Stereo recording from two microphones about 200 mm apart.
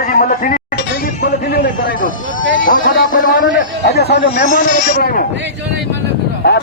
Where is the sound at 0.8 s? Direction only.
50° left (ahead or behind).